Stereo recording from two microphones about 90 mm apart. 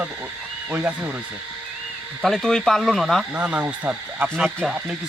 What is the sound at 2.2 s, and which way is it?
Speech, 5° left (ahead or behind).